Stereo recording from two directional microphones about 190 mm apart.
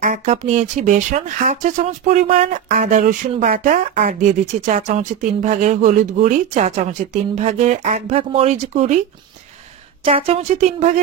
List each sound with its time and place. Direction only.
0.0 s speech: 40° right (ahead or behind)
10.0 s speech: 30° right (ahead or behind)